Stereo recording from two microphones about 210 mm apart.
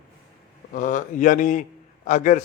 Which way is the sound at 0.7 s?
35° left (ahead or behind).